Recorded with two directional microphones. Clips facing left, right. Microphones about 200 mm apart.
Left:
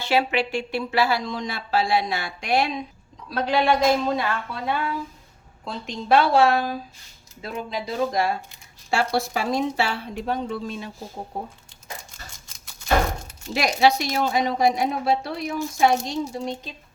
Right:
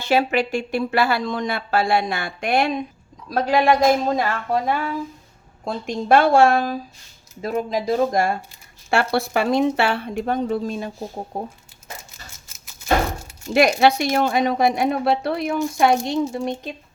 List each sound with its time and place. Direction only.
0.0 s speech: 45° right (ahead or behind)
12.5 s a sound: 5° right (ahead or behind)
13.5 s speech: 60° right (ahead or behind)